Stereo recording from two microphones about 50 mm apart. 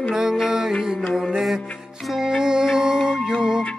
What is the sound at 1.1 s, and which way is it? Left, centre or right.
Mantra, centre.